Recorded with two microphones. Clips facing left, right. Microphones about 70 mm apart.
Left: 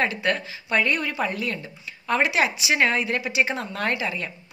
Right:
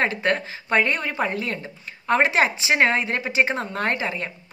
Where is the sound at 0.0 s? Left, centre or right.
Right.